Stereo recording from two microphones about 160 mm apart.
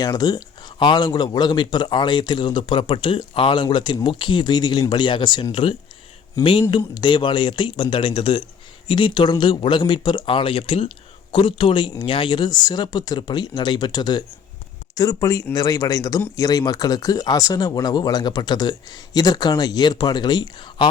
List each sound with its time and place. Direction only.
0.0 s speech: 25° left (ahead or behind)